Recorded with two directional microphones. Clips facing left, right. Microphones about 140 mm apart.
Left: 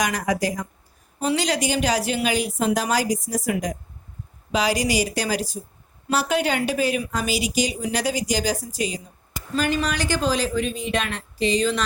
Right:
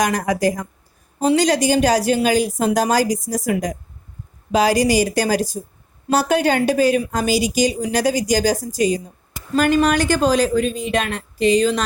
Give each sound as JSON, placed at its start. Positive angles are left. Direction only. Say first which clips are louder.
{"t": 0.0, "sound": "a woman's voice", "louder": "right 5 dB", "side_deg": -45}